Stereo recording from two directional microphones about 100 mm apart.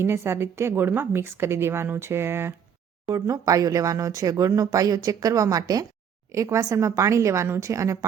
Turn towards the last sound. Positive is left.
turn(degrees=-30)  # may be behind; listen again after turning